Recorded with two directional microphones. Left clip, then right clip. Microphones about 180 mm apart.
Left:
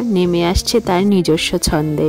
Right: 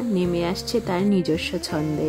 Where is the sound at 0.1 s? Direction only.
40° left (ahead or behind).